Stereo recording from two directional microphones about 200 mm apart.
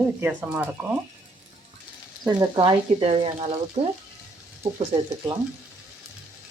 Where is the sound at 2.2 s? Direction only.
20° right (ahead or behind).